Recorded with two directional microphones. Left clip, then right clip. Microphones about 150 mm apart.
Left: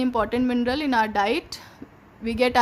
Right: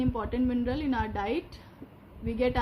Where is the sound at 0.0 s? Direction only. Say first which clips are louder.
Left 7 dB; 90° left.